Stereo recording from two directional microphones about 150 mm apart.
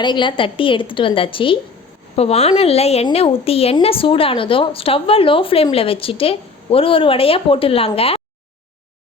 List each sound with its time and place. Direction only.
0.0 s a woman's voice: 30° left (ahead or behind)